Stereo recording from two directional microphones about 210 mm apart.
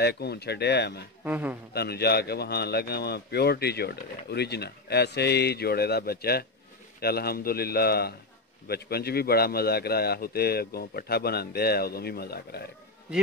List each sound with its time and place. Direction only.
0.0 s a man's voice: 50° left (ahead or behind)
1.2 s a man's voice: 5° right (ahead or behind)
1.7 s a man's voice: 50° left (ahead or behind)